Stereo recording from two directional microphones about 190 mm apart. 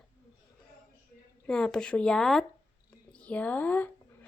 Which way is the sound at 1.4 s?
5° left (ahead or behind).